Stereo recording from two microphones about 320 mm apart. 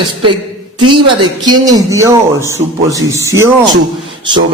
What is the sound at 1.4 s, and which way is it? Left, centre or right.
A man's voice, centre.